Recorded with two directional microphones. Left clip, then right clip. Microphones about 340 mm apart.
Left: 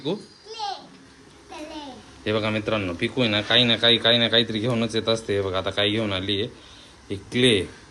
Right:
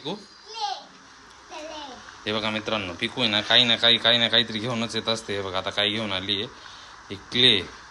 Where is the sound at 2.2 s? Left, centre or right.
Centre.